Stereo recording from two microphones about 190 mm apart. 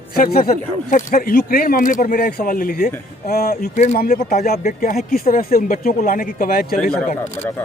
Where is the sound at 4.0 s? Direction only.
50° left (ahead or behind).